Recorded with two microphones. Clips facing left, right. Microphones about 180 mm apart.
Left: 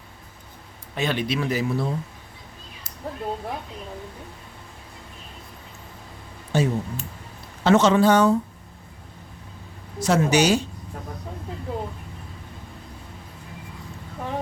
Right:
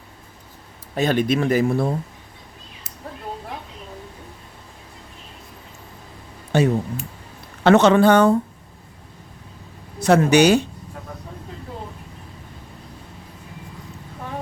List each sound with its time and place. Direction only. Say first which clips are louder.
0.9 s speech: right 6 dB; 45° right (ahead or behind)
6.5 s speech: right 4 dB; 65° right (ahead or behind)
10.0 s speech: right 5 dB; 60° right (ahead or behind)